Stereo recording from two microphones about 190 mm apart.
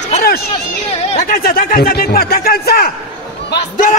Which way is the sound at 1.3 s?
50° left (ahead or behind).